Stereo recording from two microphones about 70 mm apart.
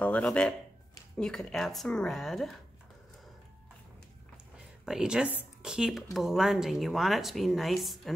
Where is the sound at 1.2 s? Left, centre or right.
Centre.